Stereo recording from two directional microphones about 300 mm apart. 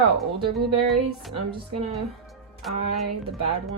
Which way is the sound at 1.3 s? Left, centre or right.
Centre.